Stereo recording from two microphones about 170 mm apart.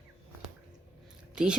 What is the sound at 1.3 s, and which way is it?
Speech, 5° right (ahead or behind).